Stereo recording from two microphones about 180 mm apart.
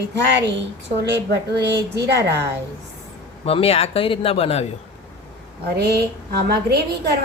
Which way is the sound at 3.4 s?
35° left (ahead or behind).